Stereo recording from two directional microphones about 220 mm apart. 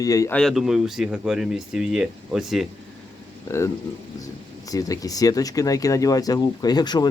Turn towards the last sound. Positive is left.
turn(degrees=20)  # may be behind; listen again after turning